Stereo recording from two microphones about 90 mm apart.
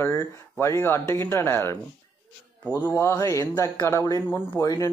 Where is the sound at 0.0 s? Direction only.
30° left (ahead or behind).